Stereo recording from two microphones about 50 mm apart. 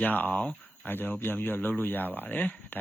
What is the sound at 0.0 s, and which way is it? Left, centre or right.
Speech, left.